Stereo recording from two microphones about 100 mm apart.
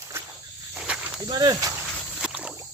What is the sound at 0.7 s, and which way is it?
Snake, 10° right (ahead or behind).